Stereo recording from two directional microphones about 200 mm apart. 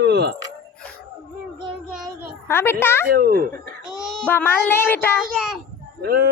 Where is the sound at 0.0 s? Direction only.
55° right (ahead or behind).